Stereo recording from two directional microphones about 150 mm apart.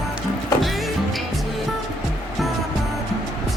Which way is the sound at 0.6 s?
Centre (ahead or behind).